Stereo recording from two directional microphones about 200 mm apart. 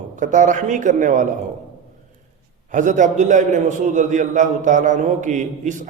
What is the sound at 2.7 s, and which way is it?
A man's voice, 40° right (ahead or behind).